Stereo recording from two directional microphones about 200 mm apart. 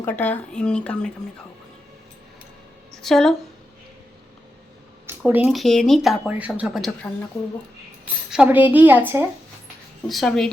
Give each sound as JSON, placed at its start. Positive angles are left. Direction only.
{"t": 0.0, "sound": "speech", "side_deg": 10}
{"t": 3.0, "sound": "speech", "side_deg": 0}
{"t": 5.0, "sound": "speech", "side_deg": -10}
{"t": 8.3, "sound": "a woman's voice", "side_deg": -5}
{"t": 10.1, "sound": "speech", "side_deg": 0}